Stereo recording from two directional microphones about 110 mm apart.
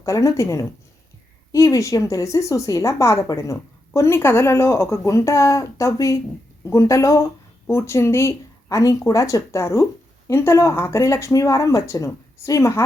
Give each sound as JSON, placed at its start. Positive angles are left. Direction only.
{"t": 0.0, "sound": "a woman's voice", "side_deg": 30}